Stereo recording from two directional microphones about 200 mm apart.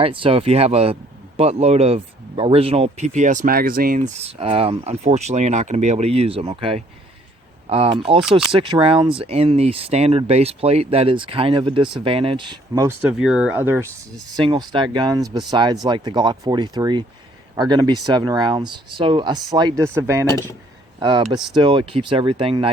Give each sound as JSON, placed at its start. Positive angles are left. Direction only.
{"t": 0.0, "sound": "speech", "side_deg": -25}
{"t": 8.2, "sound": "speech", "side_deg": 0}
{"t": 8.5, "sound": "speech", "side_deg": -25}
{"t": 13.1, "sound": "speech", "side_deg": -5}
{"t": 14.3, "sound": "speech", "side_deg": -20}